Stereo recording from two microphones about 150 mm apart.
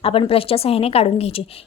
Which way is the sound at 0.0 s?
40° left (ahead or behind).